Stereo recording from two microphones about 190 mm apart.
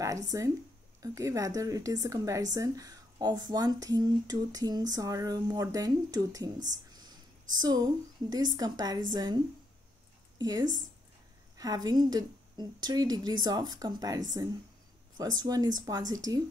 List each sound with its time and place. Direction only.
0.3 s a woman's voice: 15° right (ahead or behind)
6.9 s whispering: 20° right (ahead or behind)
7.6 s speech: 20° right (ahead or behind)
10.4 s speech: 20° right (ahead or behind)